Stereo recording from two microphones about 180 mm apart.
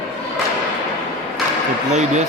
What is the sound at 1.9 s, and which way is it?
Speech, 40° right (ahead or behind).